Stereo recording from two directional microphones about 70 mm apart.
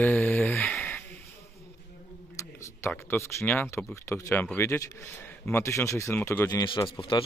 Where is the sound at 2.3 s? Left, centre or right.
Left.